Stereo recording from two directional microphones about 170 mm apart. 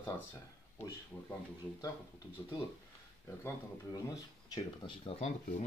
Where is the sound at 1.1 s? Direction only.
5° left (ahead or behind).